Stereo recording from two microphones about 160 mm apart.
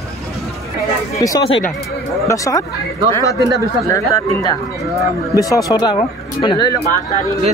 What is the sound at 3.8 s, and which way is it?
Speech, 20° left (ahead or behind).